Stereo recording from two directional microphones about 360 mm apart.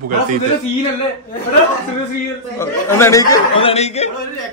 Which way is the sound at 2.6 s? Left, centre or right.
Centre.